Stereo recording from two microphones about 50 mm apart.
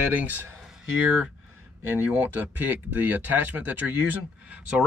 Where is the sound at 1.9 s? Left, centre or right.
Right.